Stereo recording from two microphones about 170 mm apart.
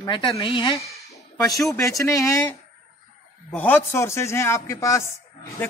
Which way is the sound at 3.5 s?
10° left (ahead or behind).